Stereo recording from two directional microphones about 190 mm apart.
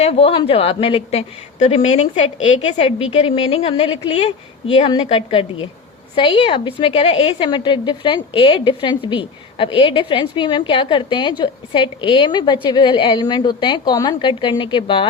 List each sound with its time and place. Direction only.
0.0 s a woman's voice: 30° left (ahead or behind)